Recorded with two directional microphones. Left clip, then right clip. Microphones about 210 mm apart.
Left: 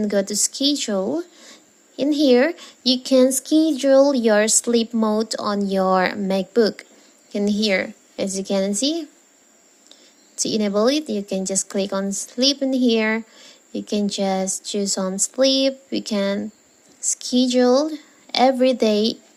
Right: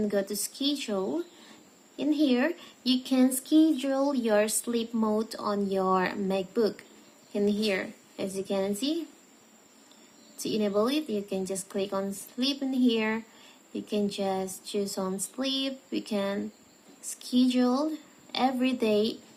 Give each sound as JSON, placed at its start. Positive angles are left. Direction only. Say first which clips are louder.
{"t": 0.0, "sound": "speech", "louder": "left 8 dB", "side_deg": 35}
{"t": 10.3, "sound": "speech", "louder": "left 7 dB", "side_deg": 30}